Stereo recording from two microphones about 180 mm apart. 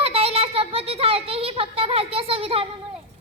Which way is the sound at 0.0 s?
35° right (ahead or behind).